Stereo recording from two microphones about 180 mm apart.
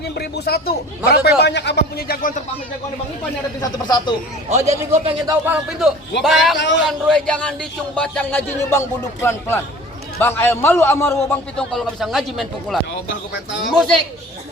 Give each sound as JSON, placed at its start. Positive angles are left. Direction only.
{"t": 0.2, "sound": "speech", "side_deg": 60}
{"t": 3.6, "sound": "speech", "side_deg": 25}
{"t": 4.4, "sound": "a man's voice", "side_deg": -35}
{"t": 5.2, "sound": "a man's voice", "side_deg": -15}
{"t": 6.6, "sound": "a man's voice", "side_deg": 85}
{"t": 6.8, "sound": "a man's voice", "side_deg": 5}
{"t": 11.5, "sound": "speech", "side_deg": 0}